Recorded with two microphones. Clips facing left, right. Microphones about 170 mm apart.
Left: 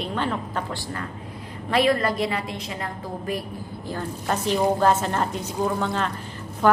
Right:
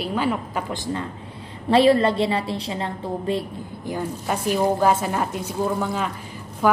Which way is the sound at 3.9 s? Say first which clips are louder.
Right 2 dB; 10° right (ahead or behind).